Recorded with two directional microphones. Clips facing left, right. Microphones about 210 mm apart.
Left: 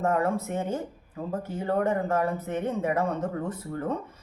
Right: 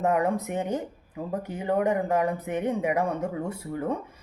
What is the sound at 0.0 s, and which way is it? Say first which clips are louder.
A woman's voice: right 1 dB; 15° right (ahead or behind).